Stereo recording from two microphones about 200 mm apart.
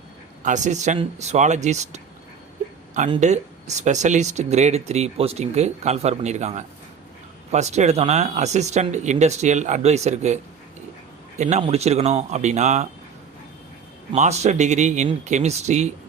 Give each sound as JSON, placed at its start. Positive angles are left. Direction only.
{"t": 0.4, "sound": "speech", "side_deg": -35}
{"t": 3.2, "sound": "speech", "side_deg": -35}
{"t": 14.1, "sound": "speech", "side_deg": -35}